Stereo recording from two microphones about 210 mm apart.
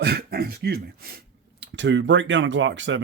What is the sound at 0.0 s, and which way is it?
Speech, 45° right (ahead or behind).